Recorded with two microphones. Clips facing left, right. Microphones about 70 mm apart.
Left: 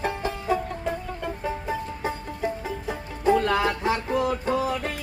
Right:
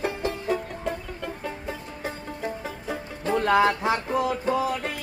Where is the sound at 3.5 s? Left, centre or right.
Right.